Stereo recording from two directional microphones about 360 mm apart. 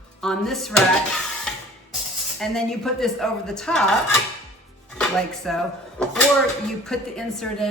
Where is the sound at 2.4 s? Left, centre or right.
Centre.